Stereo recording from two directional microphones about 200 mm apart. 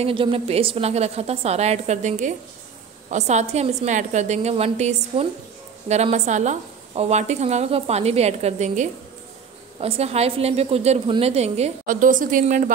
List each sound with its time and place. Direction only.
0.0 s a woman's voice: 25° right (ahead or behind)